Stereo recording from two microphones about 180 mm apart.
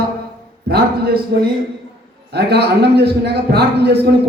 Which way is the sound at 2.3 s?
65° right (ahead or behind).